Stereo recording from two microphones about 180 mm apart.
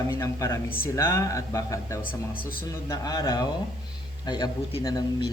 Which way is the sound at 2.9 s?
20° left (ahead or behind).